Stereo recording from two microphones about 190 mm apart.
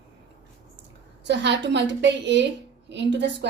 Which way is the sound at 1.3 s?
65° right (ahead or behind).